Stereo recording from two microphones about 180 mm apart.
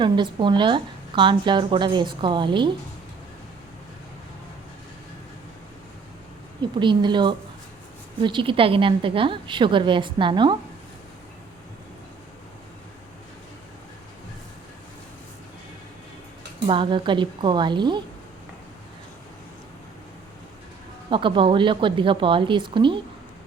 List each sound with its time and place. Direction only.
0.0 s a woman's voice: 25° right (ahead or behind)
6.6 s a woman's voice: 25° right (ahead or behind)
16.6 s a woman's voice: 30° right (ahead or behind)
21.1 s a woman's voice: 30° right (ahead or behind)